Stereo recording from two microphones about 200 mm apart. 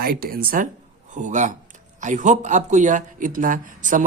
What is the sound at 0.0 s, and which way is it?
A man's voice, 50° right (ahead or behind).